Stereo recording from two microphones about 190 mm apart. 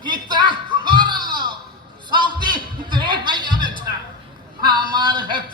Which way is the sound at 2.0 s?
25° right (ahead or behind).